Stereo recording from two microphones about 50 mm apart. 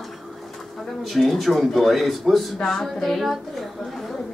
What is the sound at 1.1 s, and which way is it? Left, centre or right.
A woman's voice, centre.